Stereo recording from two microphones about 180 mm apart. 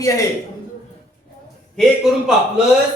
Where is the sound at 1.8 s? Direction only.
Centre (ahead or behind).